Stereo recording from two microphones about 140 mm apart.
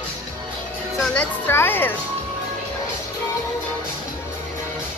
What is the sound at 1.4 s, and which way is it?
Speech, 15° left (ahead or behind).